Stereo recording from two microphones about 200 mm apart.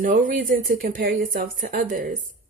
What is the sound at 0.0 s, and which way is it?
Speech, 40° right (ahead or behind).